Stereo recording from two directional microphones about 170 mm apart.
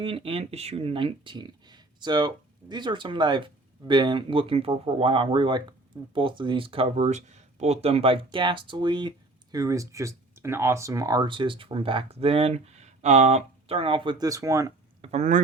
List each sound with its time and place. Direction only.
0.0 s speech: 30° right (ahead or behind)
15.0 s speech: 45° right (ahead or behind)